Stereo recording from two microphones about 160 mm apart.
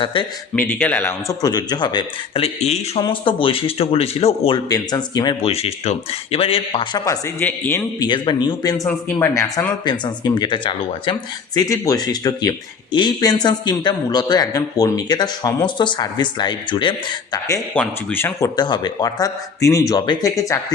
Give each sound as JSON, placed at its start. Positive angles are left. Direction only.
{"t": 0.0, "sound": "speech", "side_deg": 30}
{"t": 0.5, "sound": "speech", "side_deg": 10}
{"t": 4.7, "sound": "speech", "side_deg": 25}
{"t": 7.0, "sound": "speech", "side_deg": 20}
{"t": 7.9, "sound": "speech", "side_deg": 30}
{"t": 17.7, "sound": "speech", "side_deg": 10}